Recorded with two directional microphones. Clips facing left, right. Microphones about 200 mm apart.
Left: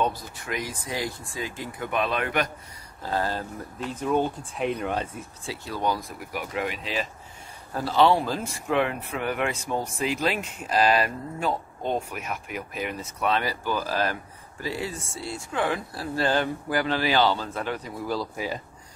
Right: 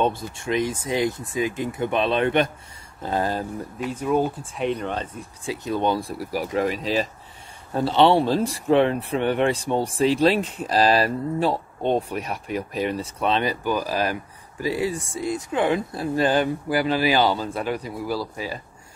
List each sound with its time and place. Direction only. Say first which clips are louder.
0.0 s speech: right 4 dB; 25° right (ahead or behind); by 5.2 s 10° left (ahead or behind)
5.4 s speech: right 6 dB; 15° right (ahead or behind); by 7.1 s 40° right (ahead or behind)
7.7 s speech: right 3 dB; 25° right (ahead or behind); by 18.3 s 10° right (ahead or behind)
18.3 s speech: even; 15° left (ahead or behind)